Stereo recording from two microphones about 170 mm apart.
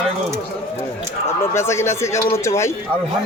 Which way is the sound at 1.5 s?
15° left (ahead or behind).